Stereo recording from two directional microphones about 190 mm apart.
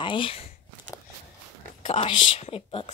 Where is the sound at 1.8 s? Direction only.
30° left (ahead or behind).